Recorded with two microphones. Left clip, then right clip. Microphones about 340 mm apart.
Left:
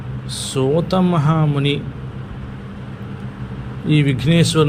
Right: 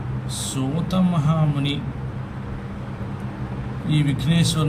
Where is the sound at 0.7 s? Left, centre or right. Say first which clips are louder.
Left 7 dB; centre.